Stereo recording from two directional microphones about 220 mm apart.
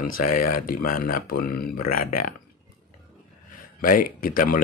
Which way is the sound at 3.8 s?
40° left (ahead or behind).